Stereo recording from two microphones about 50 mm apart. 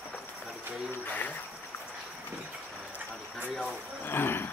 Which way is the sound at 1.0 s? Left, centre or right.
Left.